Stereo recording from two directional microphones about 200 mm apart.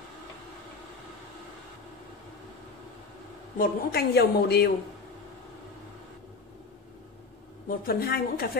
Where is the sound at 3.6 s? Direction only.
50° left (ahead or behind).